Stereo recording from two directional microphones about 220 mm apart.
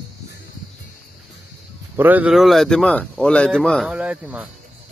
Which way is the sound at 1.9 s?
10° right (ahead or behind).